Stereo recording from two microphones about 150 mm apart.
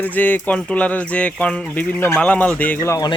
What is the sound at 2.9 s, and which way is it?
Speech, 25° left (ahead or behind).